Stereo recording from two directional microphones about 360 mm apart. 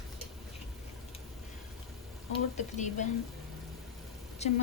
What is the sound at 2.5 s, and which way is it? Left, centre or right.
Speech, centre.